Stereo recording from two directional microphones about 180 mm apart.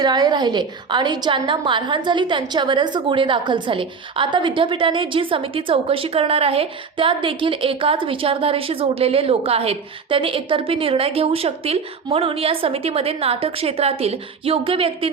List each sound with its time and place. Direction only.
0.0 s a woman's voice: 25° right (ahead or behind)